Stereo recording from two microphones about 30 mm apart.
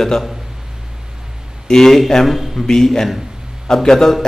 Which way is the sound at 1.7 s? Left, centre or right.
Centre.